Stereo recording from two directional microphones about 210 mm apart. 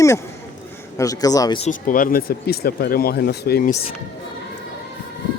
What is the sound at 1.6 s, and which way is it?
Speech, 40° left (ahead or behind).